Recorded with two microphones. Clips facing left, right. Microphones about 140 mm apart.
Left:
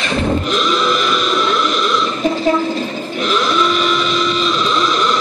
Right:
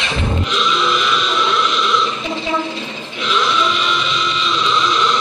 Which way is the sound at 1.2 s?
50° left (ahead or behind).